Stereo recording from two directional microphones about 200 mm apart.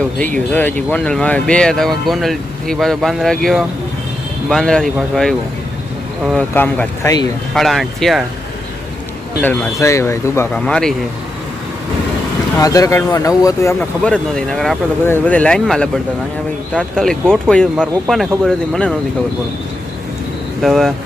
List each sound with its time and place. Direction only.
0.5 s speech: 10° left (ahead or behind)
6.3 s speech: 10° left (ahead or behind)
7.5 s speech: centre (ahead or behind)
9.4 s speech: 10° left (ahead or behind)
12.5 s speech: 15° left (ahead or behind)
20.6 s speech: centre (ahead or behind)